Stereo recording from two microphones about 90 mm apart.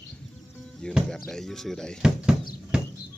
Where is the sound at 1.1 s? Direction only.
5° left (ahead or behind).